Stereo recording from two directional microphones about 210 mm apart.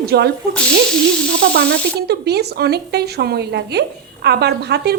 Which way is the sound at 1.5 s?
50° right (ahead or behind).